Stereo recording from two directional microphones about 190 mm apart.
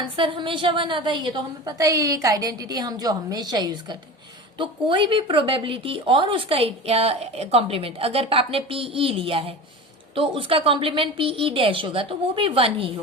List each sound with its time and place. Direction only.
0.2 s a woman's voice: 25° right (ahead or behind)